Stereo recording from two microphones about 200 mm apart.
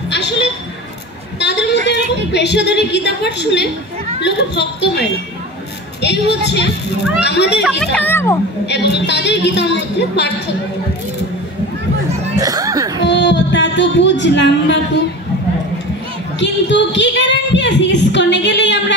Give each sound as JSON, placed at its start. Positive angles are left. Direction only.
{"t": 0.1, "sound": "a sound", "side_deg": 60}
{"t": 1.4, "sound": "a woman's voice", "side_deg": 60}
{"t": 7.2, "sound": "a woman's voice", "side_deg": 60}
{"t": 7.8, "sound": "a child's voice", "side_deg": 5}
{"t": 8.6, "sound": "a woman's voice", "side_deg": 60}
{"t": 12.4, "sound": "chuckle", "side_deg": -15}
{"t": 13.0, "sound": "speech", "side_deg": 60}
{"t": 16.3, "sound": "a woman's voice", "side_deg": 65}